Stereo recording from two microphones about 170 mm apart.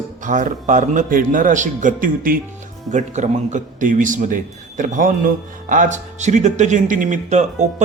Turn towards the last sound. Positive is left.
turn(degrees=-45)  # may be behind; listen again after turning